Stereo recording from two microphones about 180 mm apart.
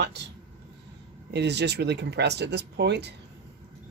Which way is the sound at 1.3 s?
70° right (ahead or behind).